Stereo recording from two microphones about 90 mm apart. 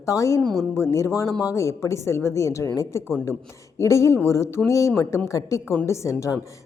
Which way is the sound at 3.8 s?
35° left (ahead or behind).